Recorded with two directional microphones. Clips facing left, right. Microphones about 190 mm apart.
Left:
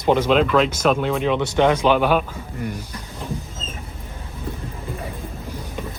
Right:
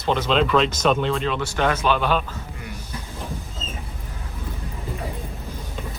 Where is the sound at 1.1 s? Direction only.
15° left (ahead or behind).